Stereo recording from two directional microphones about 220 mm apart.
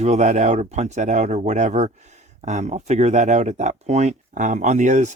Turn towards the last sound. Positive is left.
turn(degrees=-35)  # may be behind; listen again after turning